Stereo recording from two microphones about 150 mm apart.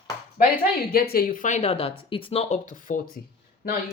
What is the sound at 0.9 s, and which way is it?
Speech, 90° left.